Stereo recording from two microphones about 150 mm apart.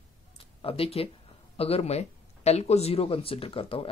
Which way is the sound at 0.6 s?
40° left (ahead or behind).